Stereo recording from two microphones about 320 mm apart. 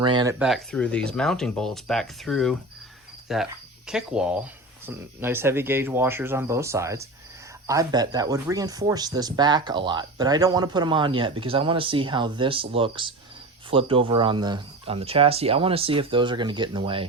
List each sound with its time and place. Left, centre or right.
0.0 s speech: centre